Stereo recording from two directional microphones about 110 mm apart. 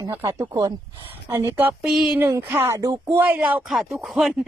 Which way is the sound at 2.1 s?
20° right (ahead or behind).